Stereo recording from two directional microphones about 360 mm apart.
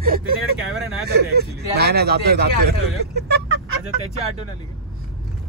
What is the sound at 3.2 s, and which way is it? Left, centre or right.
Fowl, right.